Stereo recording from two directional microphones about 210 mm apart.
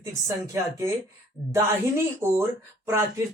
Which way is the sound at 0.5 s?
15° right (ahead or behind).